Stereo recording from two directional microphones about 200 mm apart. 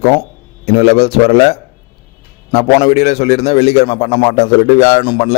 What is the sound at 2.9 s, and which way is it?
A man's voice, 30° left (ahead or behind).